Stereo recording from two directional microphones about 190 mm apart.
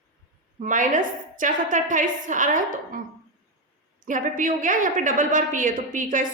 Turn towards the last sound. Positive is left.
turn(degrees=-45)  # may be behind; listen again after turning